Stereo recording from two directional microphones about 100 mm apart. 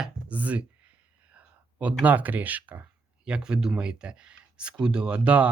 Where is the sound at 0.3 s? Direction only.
15° right (ahead or behind).